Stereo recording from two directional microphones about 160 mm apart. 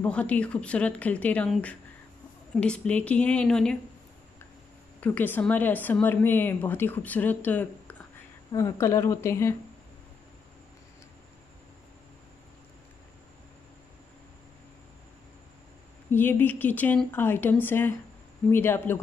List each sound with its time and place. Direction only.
0.0 s speech: 10° left (ahead or behind)
5.0 s speech: 10° left (ahead or behind)
8.5 s speech: 20° left (ahead or behind)
16.1 s speech: 10° left (ahead or behind)